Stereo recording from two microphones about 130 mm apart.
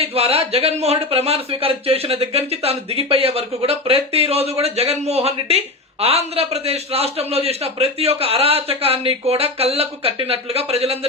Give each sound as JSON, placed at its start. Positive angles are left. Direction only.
{"t": 0.0, "sound": "speech", "side_deg": -50}